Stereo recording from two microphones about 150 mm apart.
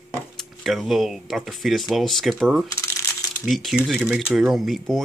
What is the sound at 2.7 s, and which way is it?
Shuffling cards, 20° left (ahead or behind).